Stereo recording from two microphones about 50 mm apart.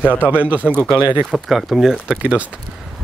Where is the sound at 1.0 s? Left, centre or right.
Right.